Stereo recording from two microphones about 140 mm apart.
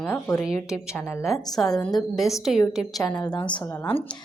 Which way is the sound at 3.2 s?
30° left (ahead or behind).